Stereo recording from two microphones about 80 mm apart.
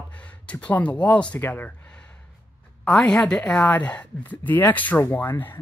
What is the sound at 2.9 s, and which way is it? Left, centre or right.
Speech, centre.